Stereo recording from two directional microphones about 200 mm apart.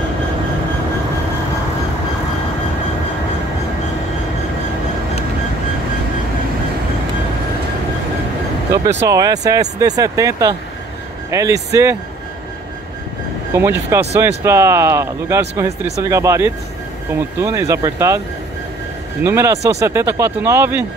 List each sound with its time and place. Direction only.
8.7 s speech: 15° right (ahead or behind)
13.6 s speech: 10° right (ahead or behind)
19.2 s speech: 15° right (ahead or behind)